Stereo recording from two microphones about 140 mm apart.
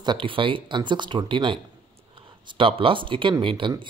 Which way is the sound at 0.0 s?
35° right (ahead or behind).